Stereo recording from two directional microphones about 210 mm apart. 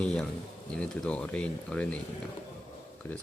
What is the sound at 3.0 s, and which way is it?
Speech, 10° left (ahead or behind).